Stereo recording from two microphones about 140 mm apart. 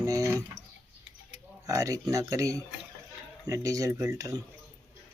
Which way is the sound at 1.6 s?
25° right (ahead or behind).